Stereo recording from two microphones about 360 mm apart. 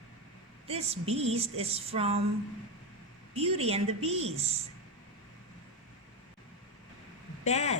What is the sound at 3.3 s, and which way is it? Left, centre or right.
Speech, centre.